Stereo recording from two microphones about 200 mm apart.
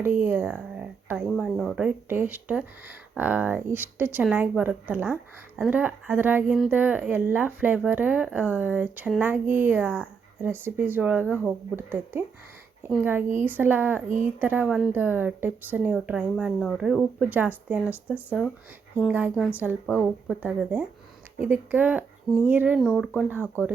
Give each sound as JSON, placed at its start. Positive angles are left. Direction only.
{"t": 0.0, "sound": "speech", "side_deg": -10}